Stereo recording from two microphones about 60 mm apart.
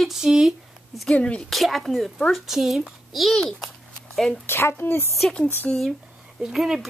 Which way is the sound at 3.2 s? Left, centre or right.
Centre.